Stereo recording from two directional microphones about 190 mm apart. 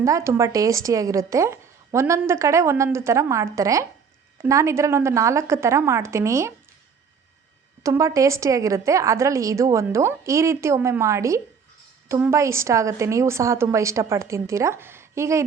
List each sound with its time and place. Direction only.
0.0 s a woman's voice: 15° right (ahead or behind)
7.9 s a woman's voice: 15° right (ahead or behind)